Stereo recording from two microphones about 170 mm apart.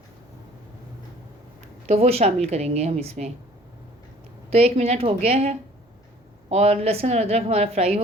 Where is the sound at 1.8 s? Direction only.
35° right (ahead or behind).